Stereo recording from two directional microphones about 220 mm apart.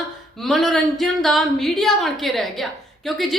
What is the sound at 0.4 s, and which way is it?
A woman's voice, centre (ahead or behind).